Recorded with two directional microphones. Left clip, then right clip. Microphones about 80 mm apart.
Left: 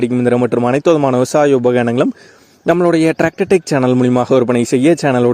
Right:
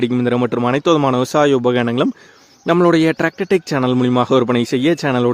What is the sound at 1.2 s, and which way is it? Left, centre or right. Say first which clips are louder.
Speech: left 3 dB; left.